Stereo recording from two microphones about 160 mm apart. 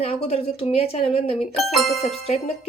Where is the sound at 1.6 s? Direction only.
Centre (ahead or behind).